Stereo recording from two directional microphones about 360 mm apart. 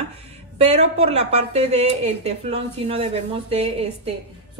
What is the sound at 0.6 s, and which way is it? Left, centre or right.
Speech, centre.